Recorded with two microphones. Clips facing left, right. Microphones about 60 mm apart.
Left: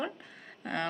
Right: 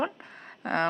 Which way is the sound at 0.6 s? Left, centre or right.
Right.